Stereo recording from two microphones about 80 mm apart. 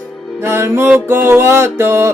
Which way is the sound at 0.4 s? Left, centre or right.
Right.